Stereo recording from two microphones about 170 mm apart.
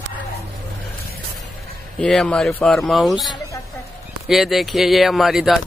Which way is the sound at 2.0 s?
5° left (ahead or behind).